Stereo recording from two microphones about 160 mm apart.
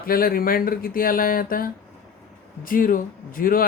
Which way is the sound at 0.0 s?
65° left (ahead or behind).